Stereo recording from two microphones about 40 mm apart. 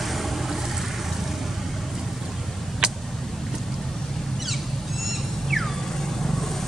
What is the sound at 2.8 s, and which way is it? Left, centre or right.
Vehicle, centre.